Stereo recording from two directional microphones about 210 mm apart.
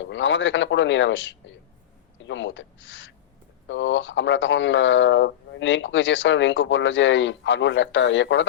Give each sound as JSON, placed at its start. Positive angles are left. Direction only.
{"t": 0.0, "sound": "speech", "side_deg": 60}